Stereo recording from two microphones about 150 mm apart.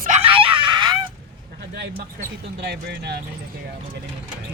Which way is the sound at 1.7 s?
90° right.